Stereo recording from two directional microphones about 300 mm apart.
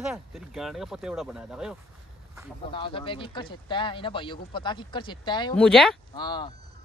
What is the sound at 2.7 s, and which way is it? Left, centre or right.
Speech, centre.